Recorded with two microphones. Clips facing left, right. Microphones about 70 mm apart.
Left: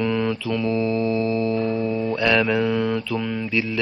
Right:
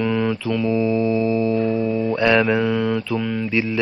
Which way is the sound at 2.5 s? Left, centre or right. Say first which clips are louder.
Right 1 dB; centre.